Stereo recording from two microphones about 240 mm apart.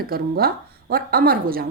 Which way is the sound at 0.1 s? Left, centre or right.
Right.